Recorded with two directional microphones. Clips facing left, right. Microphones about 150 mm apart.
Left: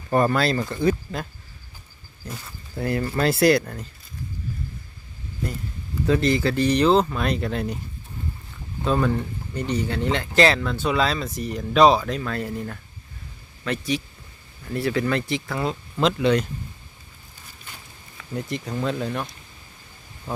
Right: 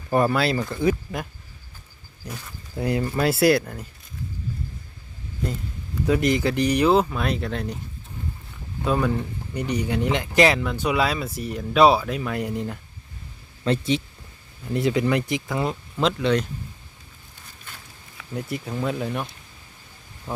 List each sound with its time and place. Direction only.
0.1 s speech: 5° right (ahead or behind)
6.1 s speech: 15° right (ahead or behind); by 7.8 s 5° left (ahead or behind)
8.8 s speech: 10° right (ahead or behind)
15.6 s speech: centre (ahead or behind)
18.2 s speech: 5° right (ahead or behind)